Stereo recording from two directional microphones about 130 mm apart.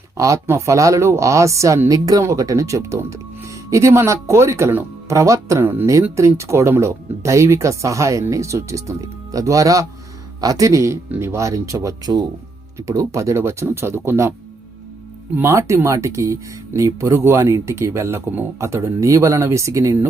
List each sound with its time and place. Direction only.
0.2 s speech: 25° right (ahead or behind)
15.4 s speech: 20° right (ahead or behind)